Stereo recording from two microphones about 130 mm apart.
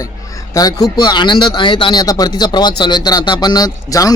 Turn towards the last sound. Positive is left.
turn(degrees=30)  # may be behind; listen again after turning